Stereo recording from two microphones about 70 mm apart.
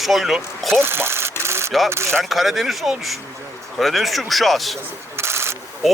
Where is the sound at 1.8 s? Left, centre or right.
Right.